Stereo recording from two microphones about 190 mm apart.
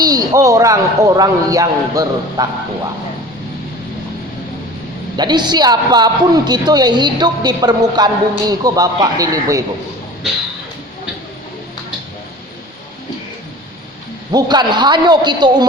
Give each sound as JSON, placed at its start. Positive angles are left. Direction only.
{"t": 0.0, "sound": "a man's voice", "side_deg": -20}
{"t": 5.1, "sound": "a man's voice", "side_deg": -20}
{"t": 14.3, "sound": "a man's voice", "side_deg": -20}